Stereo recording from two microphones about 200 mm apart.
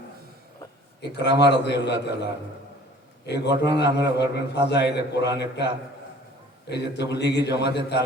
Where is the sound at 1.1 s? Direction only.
60° left (ahead or behind).